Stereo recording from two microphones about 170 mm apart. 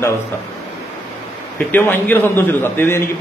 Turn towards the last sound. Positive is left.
turn(degrees=15)  # may be behind; listen again after turning